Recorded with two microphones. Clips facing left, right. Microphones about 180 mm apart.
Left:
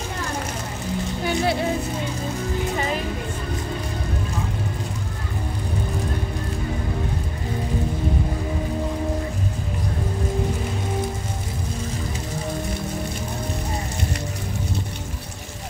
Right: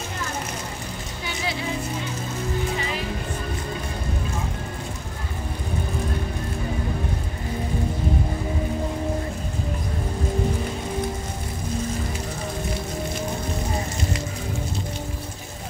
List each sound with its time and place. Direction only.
1.2 s speech: 50° left (ahead or behind)